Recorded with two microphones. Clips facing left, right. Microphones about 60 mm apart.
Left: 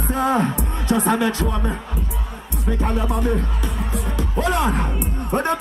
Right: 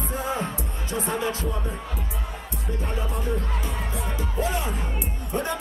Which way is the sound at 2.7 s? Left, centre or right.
Left.